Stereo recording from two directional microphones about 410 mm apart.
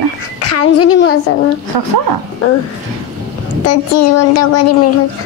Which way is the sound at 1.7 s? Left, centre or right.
Right.